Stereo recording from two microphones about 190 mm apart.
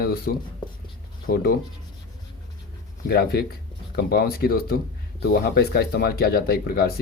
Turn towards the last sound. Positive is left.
turn(degrees=55)  # may be behind; listen again after turning